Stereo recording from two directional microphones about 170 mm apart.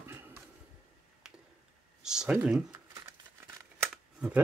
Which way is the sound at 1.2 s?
5° right (ahead or behind).